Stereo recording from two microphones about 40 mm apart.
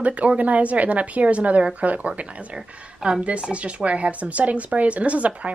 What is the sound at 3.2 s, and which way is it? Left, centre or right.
Speech, right.